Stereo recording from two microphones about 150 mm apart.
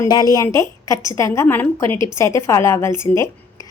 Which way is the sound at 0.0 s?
25° left (ahead or behind).